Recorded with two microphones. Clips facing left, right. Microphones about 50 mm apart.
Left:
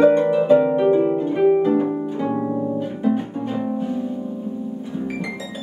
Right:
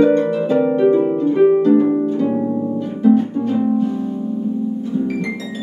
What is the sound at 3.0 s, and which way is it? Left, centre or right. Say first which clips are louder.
Music: right 10 dB; centre.